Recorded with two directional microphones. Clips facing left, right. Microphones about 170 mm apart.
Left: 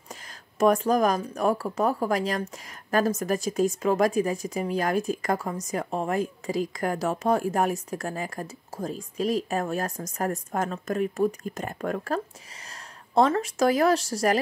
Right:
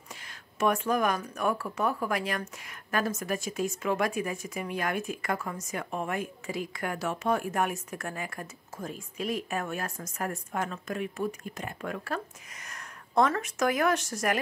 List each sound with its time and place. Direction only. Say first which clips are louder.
0.6 s speech: left 6 dB; 40° left (ahead or behind)
12.6 s speech: right 2 dB; 30° left (ahead or behind)